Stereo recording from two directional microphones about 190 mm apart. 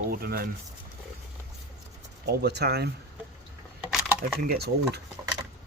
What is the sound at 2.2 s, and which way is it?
Speech, 60° right (ahead or behind).